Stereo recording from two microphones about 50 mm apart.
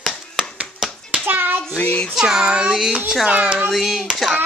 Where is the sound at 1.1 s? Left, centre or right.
Right.